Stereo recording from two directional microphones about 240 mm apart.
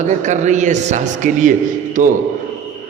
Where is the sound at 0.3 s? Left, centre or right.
Right.